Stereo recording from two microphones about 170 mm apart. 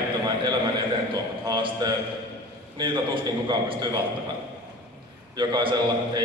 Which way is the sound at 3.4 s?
25° right (ahead or behind).